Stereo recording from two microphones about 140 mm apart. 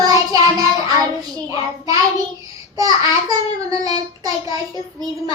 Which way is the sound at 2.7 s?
25° right (ahead or behind).